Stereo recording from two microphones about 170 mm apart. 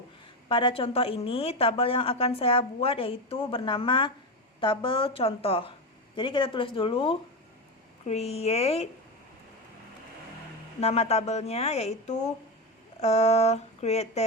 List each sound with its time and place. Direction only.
0.4 s a woman's voice: 30° left (ahead or behind)
10.8 s a woman's voice: 40° left (ahead or behind)